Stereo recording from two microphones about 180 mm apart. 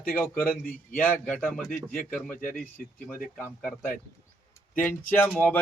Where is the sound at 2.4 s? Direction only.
50° left (ahead or behind).